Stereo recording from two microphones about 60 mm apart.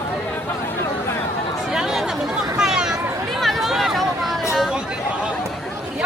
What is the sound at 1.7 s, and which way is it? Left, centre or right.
Chatter, centre.